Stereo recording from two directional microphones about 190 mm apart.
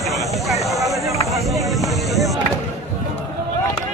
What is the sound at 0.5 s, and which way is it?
Speech, 15° right (ahead or behind).